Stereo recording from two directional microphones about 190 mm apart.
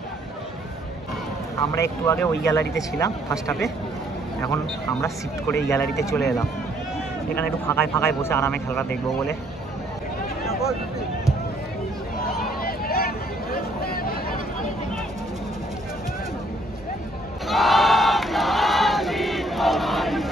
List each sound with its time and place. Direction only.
1.6 s speech: 15° left (ahead or behind)
5.7 s speech: 15° left (ahead or behind)
7.3 s speech: 10° left (ahead or behind)
12.2 s hubbub: 50° left (ahead or behind)
17.5 s choir: centre (ahead or behind)